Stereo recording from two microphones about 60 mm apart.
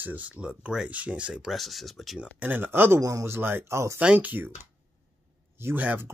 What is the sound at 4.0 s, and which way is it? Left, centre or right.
Speech, right.